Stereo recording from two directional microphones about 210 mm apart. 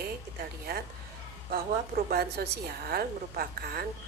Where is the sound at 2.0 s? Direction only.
45° right (ahead or behind).